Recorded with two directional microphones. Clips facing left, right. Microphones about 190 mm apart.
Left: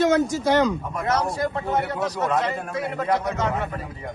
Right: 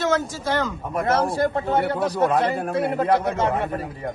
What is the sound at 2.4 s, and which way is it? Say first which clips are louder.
A man's voice: right 5 dB; 55° right (ahead or behind).